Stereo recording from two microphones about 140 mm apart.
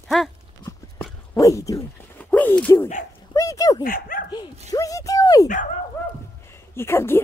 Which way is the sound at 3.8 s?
90° left.